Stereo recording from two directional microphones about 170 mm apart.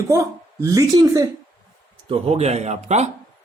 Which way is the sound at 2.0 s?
30° right (ahead or behind).